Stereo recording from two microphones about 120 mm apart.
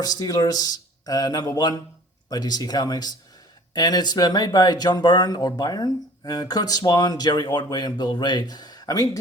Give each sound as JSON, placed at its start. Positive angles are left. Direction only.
{"t": 0.0, "sound": "speech", "side_deg": 30}